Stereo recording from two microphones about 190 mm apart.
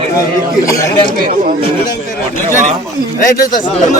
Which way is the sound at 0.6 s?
15° left (ahead or behind).